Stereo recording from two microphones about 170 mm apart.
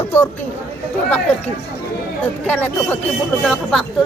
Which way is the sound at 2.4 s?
10° left (ahead or behind).